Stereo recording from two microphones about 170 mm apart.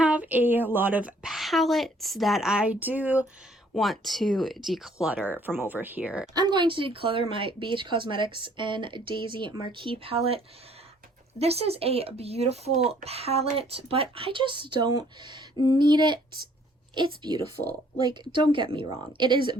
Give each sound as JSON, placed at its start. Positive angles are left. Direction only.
{"t": 0.0, "sound": "a woman's voice", "side_deg": -10}
{"t": 3.8, "sound": "a woman's voice", "side_deg": 0}
{"t": 6.3, "sound": "speech", "side_deg": -25}